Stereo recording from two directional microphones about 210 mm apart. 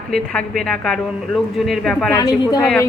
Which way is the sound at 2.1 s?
20° left (ahead or behind).